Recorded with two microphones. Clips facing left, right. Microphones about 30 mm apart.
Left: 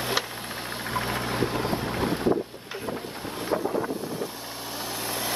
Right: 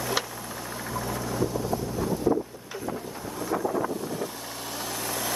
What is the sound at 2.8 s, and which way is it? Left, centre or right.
Wind noise, left.